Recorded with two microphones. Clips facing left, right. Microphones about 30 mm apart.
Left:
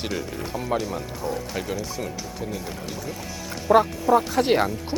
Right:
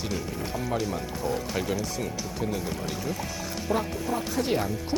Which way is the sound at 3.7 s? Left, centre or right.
Left.